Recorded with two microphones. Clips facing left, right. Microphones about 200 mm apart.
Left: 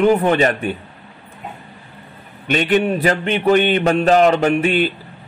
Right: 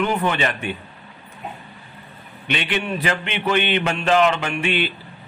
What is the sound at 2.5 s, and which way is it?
A man's voice, 45° left (ahead or behind).